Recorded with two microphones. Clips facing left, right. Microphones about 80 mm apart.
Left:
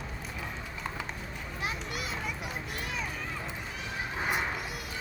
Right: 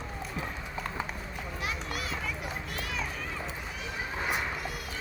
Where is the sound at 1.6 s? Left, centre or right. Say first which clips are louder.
Even; left.